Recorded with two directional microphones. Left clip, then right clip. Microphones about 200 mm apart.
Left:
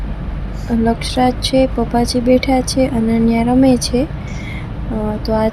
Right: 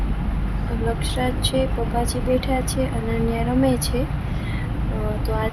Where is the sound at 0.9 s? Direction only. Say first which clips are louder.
Left 9 dB; 20° left (ahead or behind).